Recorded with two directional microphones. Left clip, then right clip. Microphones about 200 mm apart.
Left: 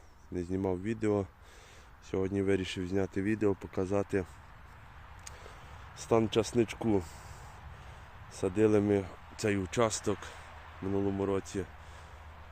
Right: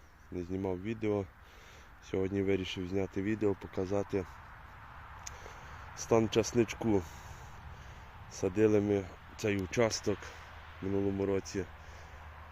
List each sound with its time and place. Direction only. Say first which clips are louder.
0.3 s speech: left 3 dB; 25° left (ahead or behind)
2.0 s speech: left 1 dB; 5° left (ahead or behind)
2.6 s speech: left 2 dB; 20° left (ahead or behind)
6.0 s speech: even; centre (ahead or behind)
8.4 s speech: left 1 dB; 5° left (ahead or behind)
8.8 s speech: left 2 dB; 20° left (ahead or behind); by 11.4 s 5° left (ahead or behind)